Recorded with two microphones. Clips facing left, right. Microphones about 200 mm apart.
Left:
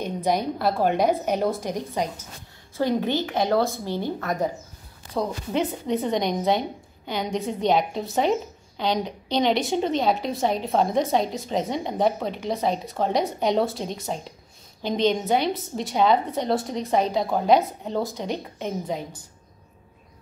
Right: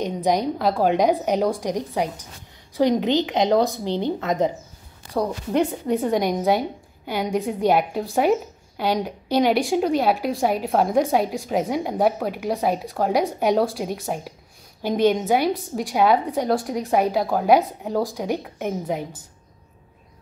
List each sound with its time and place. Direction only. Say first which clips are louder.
0.0 s a woman's voice: right 3 dB; 15° right (ahead or behind)